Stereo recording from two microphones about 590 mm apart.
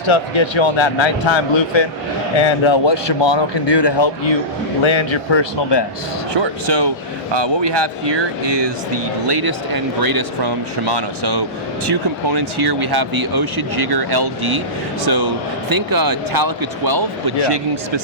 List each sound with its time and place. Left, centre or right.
0.1 s a man's voice: left
6.3 s speech: right